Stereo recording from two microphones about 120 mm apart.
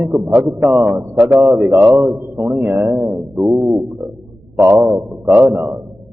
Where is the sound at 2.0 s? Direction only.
Centre (ahead or behind).